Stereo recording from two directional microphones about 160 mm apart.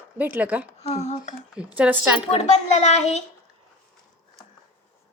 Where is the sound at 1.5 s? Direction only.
5° right (ahead or behind).